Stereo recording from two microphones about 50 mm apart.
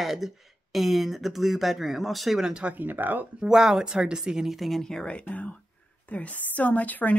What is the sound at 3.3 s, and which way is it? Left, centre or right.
A woman's voice, centre.